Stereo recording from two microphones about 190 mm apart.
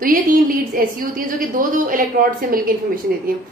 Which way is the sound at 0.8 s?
50° right (ahead or behind).